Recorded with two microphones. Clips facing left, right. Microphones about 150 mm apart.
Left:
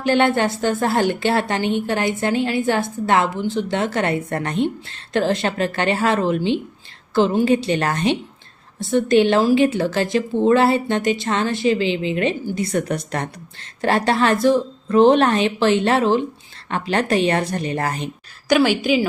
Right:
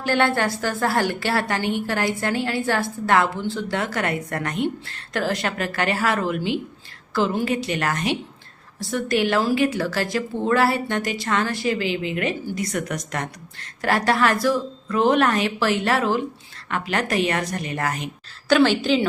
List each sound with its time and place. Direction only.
0.0 s a woman's voice: 20° left (ahead or behind)
18.4 s a woman's voice: 15° left (ahead or behind)